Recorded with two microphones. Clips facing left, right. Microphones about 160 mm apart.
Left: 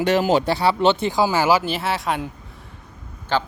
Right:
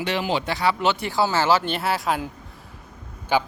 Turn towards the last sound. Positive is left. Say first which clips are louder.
# right 1 dB
turn(degrees=-10)  # may be behind; listen again after turning